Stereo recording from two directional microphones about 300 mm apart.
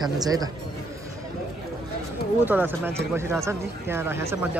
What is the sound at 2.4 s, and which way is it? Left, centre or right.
Speech, centre.